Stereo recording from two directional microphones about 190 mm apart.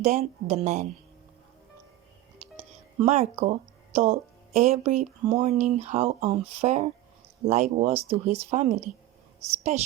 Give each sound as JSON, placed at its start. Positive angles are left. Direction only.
{"t": 0.0, "sound": "speech", "side_deg": -35}
{"t": 3.0, "sound": "speech", "side_deg": -35}